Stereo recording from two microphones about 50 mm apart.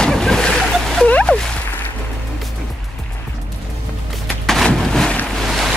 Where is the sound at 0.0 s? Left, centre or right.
Centre.